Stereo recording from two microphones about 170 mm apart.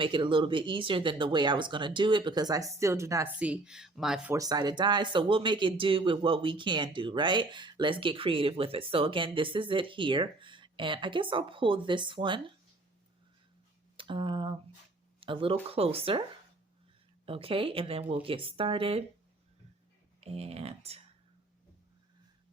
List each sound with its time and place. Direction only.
0.0 s speech: 30° right (ahead or behind)
3.3 s speech: 5° right (ahead or behind)
4.4 s speech: 20° right (ahead or behind)
13.9 s speech: 30° right (ahead or behind)
17.2 s speech: 35° right (ahead or behind)
20.2 s speech: 35° right (ahead or behind)